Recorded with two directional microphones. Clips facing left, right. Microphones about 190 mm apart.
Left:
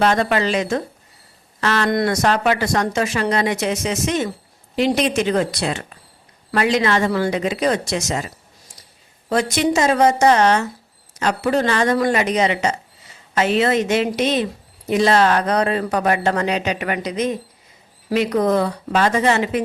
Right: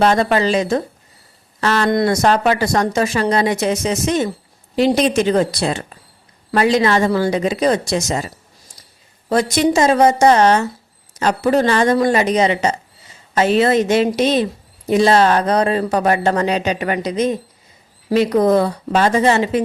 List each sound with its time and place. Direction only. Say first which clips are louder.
0.0 s speech: right 3 dB; 35° right (ahead or behind)
9.3 s speech: right 3 dB; 35° right (ahead or behind)